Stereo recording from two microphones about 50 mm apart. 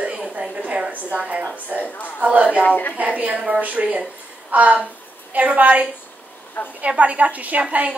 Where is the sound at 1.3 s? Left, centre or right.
Right.